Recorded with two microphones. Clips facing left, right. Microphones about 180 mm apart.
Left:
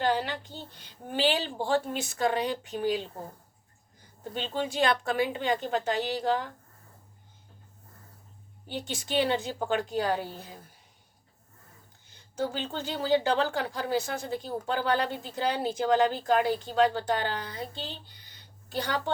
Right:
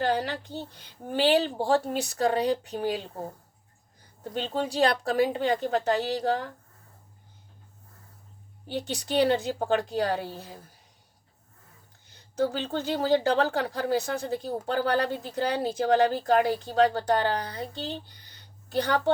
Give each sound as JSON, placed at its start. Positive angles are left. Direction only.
{"t": 0.1, "sound": "a sound", "side_deg": -40}
{"t": 1.1, "sound": "a woman's voice", "side_deg": -40}
{"t": 4.2, "sound": "a woman's voice", "side_deg": -40}
{"t": 8.7, "sound": "a woman's voice", "side_deg": -35}
{"t": 12.4, "sound": "a woman's voice", "side_deg": -40}